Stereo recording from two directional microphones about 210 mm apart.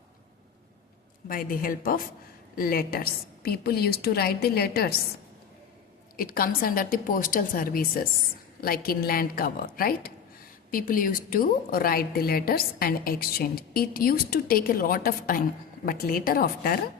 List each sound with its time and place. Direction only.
1.3 s a woman's voice: 45° left (ahead or behind)
6.1 s a woman's voice: 45° left (ahead or behind)